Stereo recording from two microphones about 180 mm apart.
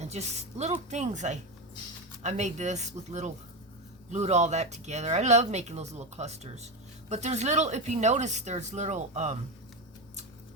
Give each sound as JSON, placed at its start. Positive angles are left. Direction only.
{"t": 0.0, "sound": "speech", "side_deg": -40}